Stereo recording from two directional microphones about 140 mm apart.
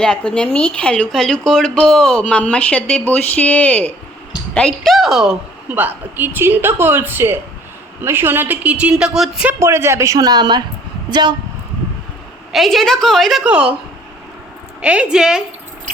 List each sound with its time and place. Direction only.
0.0 s a woman's voice: 5° left (ahead or behind)
9.6 s a woman's voice: 20° right (ahead or behind)
12.5 s a woman's voice: centre (ahead or behind)
14.8 s a woman's voice: 10° right (ahead or behind)